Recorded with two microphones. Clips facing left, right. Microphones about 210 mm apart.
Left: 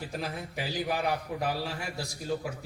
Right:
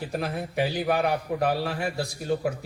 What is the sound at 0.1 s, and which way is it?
A man's voice, 60° right (ahead or behind).